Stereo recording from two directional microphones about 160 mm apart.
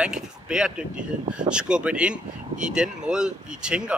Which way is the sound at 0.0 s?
5° right (ahead or behind).